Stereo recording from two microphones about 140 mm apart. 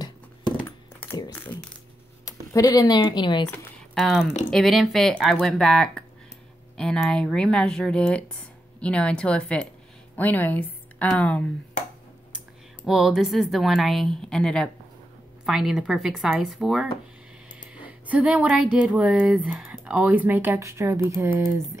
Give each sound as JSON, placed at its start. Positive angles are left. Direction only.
{"t": 0.0, "sound": "dog", "side_deg": 35}
{"t": 0.7, "sound": "typing", "side_deg": 30}
{"t": 2.2, "sound": "speech", "side_deg": 25}
{"t": 3.9, "sound": "a woman's voice", "side_deg": 0}
{"t": 12.8, "sound": "speech", "side_deg": 0}